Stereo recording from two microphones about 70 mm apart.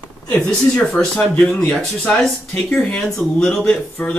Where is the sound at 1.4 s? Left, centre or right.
Left.